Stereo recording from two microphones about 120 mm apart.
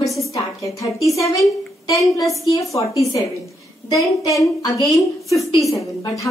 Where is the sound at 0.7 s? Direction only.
25° left (ahead or behind).